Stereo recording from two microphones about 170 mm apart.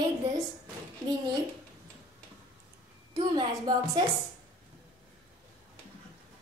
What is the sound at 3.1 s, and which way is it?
Speech, 30° right (ahead or behind).